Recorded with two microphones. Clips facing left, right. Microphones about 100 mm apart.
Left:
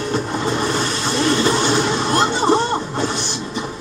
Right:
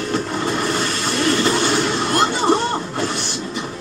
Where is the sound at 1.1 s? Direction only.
20° left (ahead or behind).